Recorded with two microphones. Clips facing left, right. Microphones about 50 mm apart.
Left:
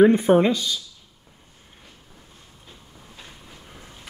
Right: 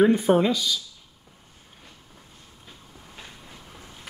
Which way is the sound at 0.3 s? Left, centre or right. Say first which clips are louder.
Left 3 dB; centre.